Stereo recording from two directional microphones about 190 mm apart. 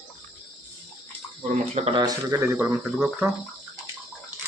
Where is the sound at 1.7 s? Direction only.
30° right (ahead or behind); by 2.8 s 15° right (ahead or behind).